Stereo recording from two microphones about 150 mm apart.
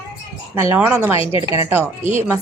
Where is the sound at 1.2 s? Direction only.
40° left (ahead or behind).